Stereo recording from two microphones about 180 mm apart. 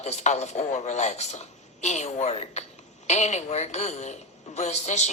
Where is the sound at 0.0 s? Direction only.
40° left (ahead or behind).